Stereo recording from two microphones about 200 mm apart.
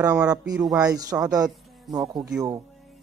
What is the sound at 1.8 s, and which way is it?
Speech, centre (ahead or behind).